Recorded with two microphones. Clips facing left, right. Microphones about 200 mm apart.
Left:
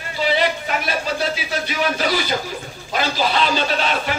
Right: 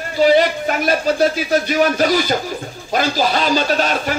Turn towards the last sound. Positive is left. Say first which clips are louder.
# right 3 dB
turn(degrees=-45)  # may be behind; listen again after turning